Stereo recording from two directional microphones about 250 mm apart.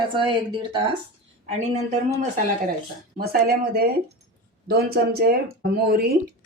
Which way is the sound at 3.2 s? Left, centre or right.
Right.